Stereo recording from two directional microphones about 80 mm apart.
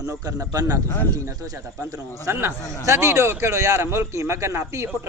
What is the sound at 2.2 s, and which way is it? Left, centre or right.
A woman's voice, right.